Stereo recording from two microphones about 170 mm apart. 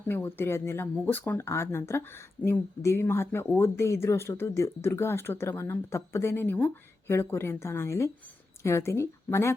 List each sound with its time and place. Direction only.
0.1 s speech: 15° left (ahead or behind)